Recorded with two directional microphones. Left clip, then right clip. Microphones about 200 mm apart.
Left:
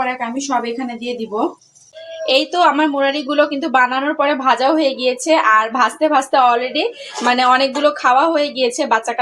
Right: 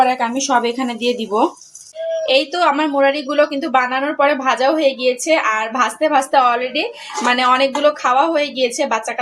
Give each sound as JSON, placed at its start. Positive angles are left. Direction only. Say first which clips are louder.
{"t": 0.0, "sound": "a woman's voice", "louder": "right 5 dB", "side_deg": -30}
{"t": 2.2, "sound": "a woman's voice", "louder": "left 2 dB", "side_deg": 5}